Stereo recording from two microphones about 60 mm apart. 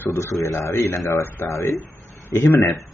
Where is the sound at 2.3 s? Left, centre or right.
Left.